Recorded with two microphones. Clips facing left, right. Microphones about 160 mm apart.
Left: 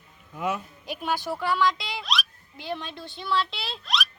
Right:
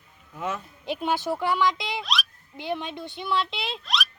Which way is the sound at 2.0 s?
Centre (ahead or behind).